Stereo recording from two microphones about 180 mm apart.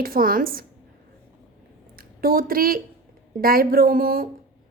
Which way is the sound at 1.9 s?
55° right (ahead or behind).